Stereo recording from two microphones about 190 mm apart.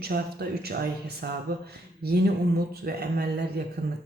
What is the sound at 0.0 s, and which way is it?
Speech, 55° right (ahead or behind).